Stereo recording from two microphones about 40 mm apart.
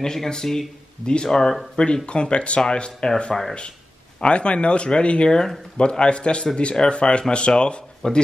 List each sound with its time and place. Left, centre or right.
0.0 s speech: centre